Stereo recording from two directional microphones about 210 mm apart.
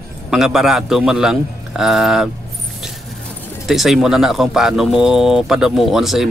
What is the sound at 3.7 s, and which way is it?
Speech, centre (ahead or behind).